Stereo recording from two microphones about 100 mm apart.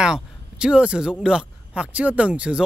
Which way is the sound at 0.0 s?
10° right (ahead or behind).